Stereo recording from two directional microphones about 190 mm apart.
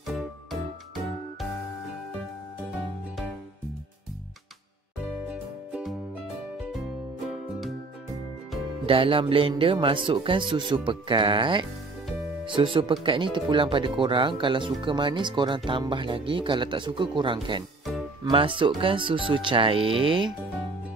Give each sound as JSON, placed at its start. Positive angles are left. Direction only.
{"t": 0.0, "sound": "music", "side_deg": 0}
{"t": 5.3, "sound": "music", "side_deg": -5}
{"t": 8.8, "sound": "speech", "side_deg": -30}